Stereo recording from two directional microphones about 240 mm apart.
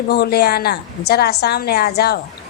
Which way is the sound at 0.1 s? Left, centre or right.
Left.